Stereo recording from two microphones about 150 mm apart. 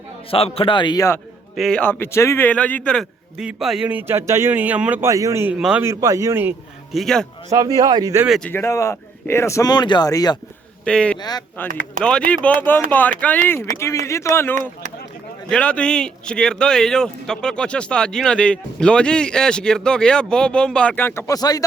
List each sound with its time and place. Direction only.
0.3 s a man's voice: 40° left (ahead or behind)
1.5 s a man's voice: 5° left (ahead or behind); by 5.5 s 15° right (ahead or behind)
5.5 s speech: 5° right (ahead or behind)
5.8 s a man's voice: 20° right (ahead or behind)
6.9 s speech: centre (ahead or behind)
7.5 s a man's voice: 25° right (ahead or behind)
8.4 s speech: 15° left (ahead or behind)
10.8 s a man's voice: 5° left (ahead or behind)
11.2 s speech: 25° left (ahead or behind)
12.5 s a man's voice: 10° left (ahead or behind)